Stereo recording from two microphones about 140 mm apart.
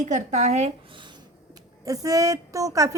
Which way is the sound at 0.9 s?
35° right (ahead or behind).